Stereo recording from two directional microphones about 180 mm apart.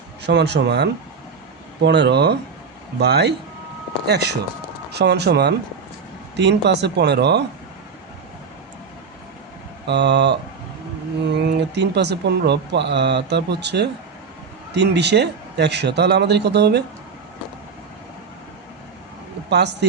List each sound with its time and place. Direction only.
0.2 s speech: 70° right (ahead or behind)
9.8 s speech: 70° right (ahead or behind)
19.5 s speech: 70° right (ahead or behind)